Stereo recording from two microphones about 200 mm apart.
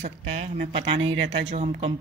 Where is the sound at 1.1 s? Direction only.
70° right (ahead or behind).